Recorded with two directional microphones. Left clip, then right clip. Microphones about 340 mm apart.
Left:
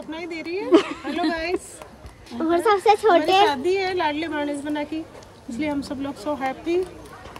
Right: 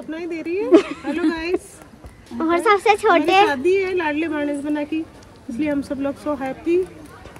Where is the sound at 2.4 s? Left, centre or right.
Centre.